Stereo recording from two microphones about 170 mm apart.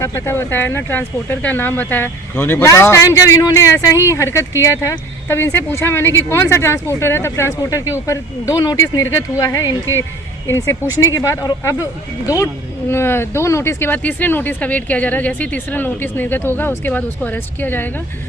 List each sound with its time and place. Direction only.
0.0 s speech: 15° left (ahead or behind)
12.9 s speech: 15° left (ahead or behind)